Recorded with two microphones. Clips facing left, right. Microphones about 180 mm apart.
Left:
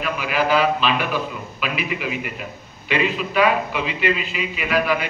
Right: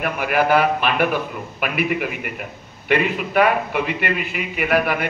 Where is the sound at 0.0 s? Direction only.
55° right (ahead or behind).